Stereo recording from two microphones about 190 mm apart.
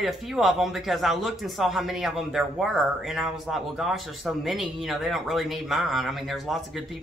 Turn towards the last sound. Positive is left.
turn(degrees=0)  # may be behind; listen again after turning